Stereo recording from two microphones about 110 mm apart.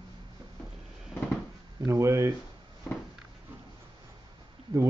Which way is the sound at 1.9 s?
30° right (ahead or behind).